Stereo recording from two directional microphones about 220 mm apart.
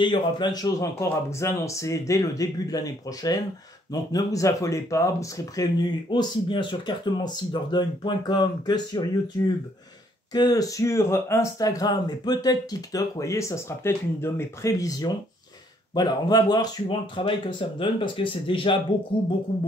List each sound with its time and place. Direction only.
0.0 s speech: 20° left (ahead or behind)
10.3 s speech: 15° left (ahead or behind)